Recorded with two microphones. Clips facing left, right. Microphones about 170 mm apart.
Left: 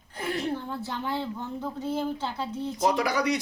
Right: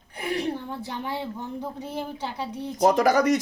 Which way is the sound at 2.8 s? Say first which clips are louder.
Right 6 dB; 45° right (ahead or behind).